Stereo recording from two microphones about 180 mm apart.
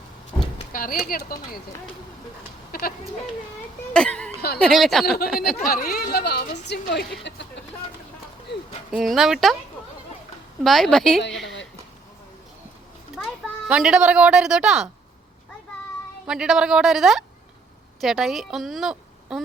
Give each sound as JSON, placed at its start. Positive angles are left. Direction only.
{"t": 0.7, "sound": "speech", "side_deg": 50}
{"t": 2.7, "sound": "a sound", "side_deg": 55}
{"t": 3.9, "sound": "speech", "side_deg": 5}
{"t": 4.4, "sound": "speech", "side_deg": 60}
{"t": 4.6, "sound": "a woman's voice", "side_deg": 0}
{"t": 5.0, "sound": "speech", "side_deg": 60}
{"t": 6.7, "sound": "speech", "side_deg": 75}
{"t": 8.9, "sound": "a woman's voice", "side_deg": 0}
{"t": 10.6, "sound": "a woman's voice", "side_deg": 0}
{"t": 13.1, "sound": "speech", "side_deg": 0}
{"t": 16.2, "sound": "a woman's voice", "side_deg": -5}